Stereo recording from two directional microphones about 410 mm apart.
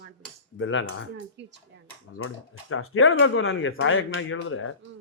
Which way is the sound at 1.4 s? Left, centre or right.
Right.